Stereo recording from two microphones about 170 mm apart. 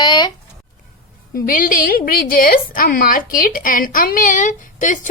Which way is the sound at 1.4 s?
55° left (ahead or behind).